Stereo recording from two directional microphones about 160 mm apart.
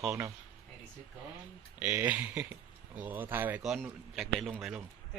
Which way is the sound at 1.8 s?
10° right (ahead or behind).